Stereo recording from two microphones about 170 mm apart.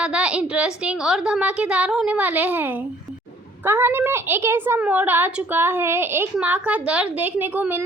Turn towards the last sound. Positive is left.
turn(degrees=-10)  # may be behind; listen again after turning